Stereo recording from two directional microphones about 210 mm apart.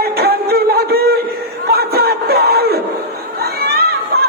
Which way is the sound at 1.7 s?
45° right (ahead or behind).